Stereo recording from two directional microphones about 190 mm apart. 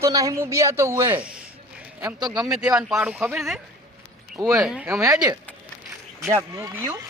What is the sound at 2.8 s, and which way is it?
Speech, 5° right (ahead or behind).